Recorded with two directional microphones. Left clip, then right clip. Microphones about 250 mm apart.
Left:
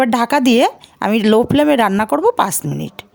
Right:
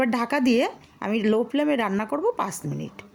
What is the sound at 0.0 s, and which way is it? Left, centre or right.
Speech, left.